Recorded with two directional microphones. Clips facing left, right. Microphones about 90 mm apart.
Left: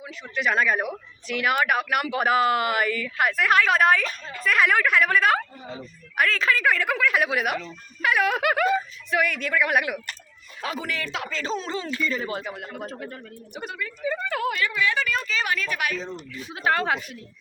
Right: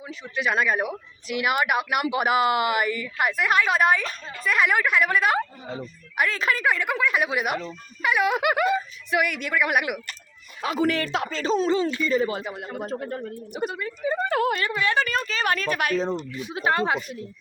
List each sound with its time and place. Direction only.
0.4 s a woman's voice: 15° right (ahead or behind)
7.0 s a woman's voice: centre (ahead or behind)
10.6 s speech: 25° right (ahead or behind)
10.9 s a woman's voice: 40° right (ahead or behind)
11.3 s speech: 30° right (ahead or behind)
12.9 s a woman's voice: 40° right (ahead or behind)
13.5 s speech: 20° right (ahead or behind)
14.2 s a woman's voice: 40° right (ahead or behind)
16.6 s a woman's voice: 5° right (ahead or behind)